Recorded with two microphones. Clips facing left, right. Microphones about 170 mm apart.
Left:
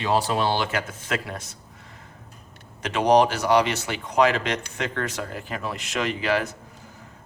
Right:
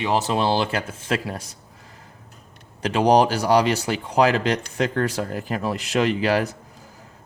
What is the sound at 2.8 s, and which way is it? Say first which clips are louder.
Speech: right 2 dB; 35° right (ahead or behind).